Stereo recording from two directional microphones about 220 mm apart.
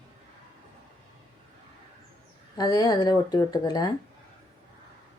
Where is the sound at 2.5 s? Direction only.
15° left (ahead or behind).